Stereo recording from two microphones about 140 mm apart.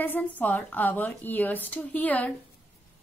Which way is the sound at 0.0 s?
10° left (ahead or behind).